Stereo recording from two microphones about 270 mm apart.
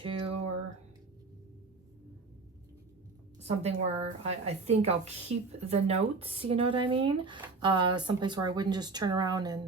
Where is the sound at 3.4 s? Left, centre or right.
Right.